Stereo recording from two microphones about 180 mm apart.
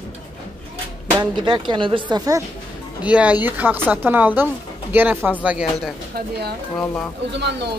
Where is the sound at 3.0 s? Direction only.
10° right (ahead or behind).